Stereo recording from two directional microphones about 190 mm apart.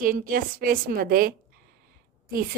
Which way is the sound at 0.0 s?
45° right (ahead or behind).